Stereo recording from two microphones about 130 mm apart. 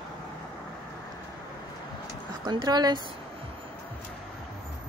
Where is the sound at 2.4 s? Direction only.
35° right (ahead or behind).